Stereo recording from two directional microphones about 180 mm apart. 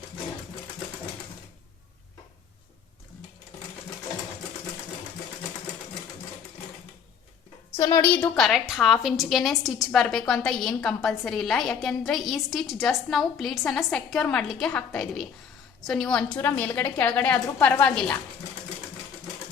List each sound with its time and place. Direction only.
7.8 s a woman's voice: 20° left (ahead or behind)
8.4 s a woman's voice: centre (ahead or behind)